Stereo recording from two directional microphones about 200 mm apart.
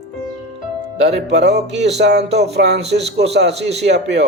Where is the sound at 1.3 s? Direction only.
60° right (ahead or behind).